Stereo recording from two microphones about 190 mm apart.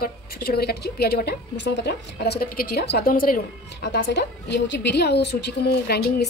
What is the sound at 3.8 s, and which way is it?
A woman's voice, 65° left (ahead or behind).